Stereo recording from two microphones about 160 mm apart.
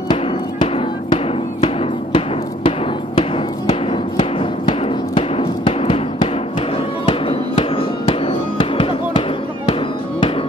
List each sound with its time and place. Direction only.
0.1 s music: 30° left (ahead or behind)
7.1 s music: 35° left (ahead or behind)